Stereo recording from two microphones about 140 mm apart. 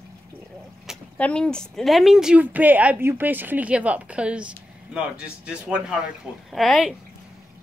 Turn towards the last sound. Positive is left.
turn(degrees=0)  # may be behind; listen again after turning